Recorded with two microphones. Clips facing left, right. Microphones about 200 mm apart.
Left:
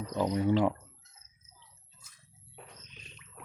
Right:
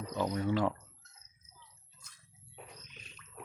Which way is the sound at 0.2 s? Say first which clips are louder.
Left 4 dB; 15° left (ahead or behind).